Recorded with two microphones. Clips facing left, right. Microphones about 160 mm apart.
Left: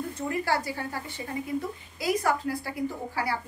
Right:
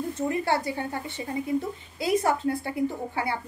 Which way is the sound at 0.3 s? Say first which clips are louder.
Right 1 dB; 25° right (ahead or behind).